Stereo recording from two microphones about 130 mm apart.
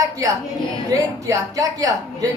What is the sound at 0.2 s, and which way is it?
A woman's voice, 25° right (ahead or behind).